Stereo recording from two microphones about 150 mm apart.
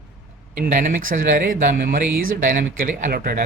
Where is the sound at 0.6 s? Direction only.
65° right (ahead or behind).